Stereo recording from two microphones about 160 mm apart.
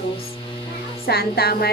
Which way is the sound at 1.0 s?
75° left (ahead or behind).